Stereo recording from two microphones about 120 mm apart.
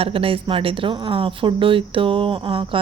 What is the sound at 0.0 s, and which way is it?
A woman's voice, 50° right (ahead or behind).